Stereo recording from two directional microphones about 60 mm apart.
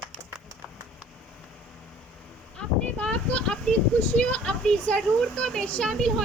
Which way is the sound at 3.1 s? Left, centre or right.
Left.